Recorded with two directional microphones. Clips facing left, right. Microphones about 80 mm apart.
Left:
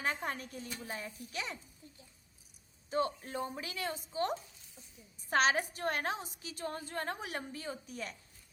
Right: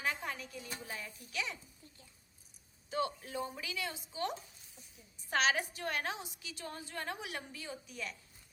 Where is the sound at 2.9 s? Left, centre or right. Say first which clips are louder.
Left 3 dB; left.